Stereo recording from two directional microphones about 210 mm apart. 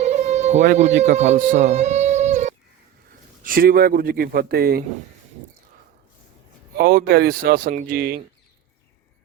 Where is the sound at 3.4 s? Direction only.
45° right (ahead or behind).